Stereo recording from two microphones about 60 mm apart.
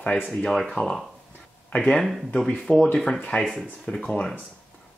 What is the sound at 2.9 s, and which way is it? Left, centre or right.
Speech, centre.